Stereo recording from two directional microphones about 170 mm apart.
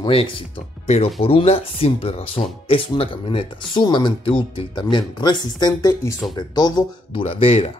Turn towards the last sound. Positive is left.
turn(degrees=35)  # may be behind; listen again after turning